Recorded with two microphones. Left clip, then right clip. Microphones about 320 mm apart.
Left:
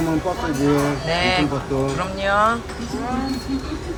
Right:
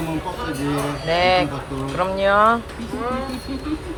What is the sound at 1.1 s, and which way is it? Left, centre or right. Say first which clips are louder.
Speech: right 5 dB; centre.